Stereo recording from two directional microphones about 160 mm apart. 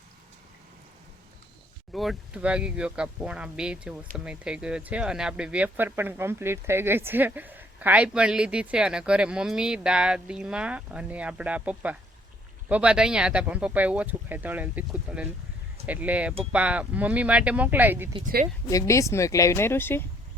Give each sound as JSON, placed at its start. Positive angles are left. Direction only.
{"t": 1.9, "sound": "speech", "side_deg": 0}
{"t": 18.7, "sound": "speech", "side_deg": 20}